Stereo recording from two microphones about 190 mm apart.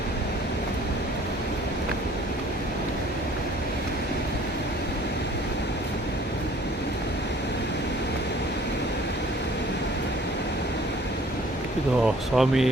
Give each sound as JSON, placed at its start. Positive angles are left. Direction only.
{"t": 12.0, "sound": "speech", "side_deg": 0}